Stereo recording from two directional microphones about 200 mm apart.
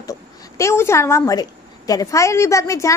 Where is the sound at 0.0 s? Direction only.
15° left (ahead or behind).